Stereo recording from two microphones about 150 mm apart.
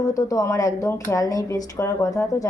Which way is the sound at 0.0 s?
20° left (ahead or behind).